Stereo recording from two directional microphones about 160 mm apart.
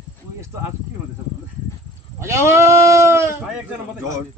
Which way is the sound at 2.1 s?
15° right (ahead or behind).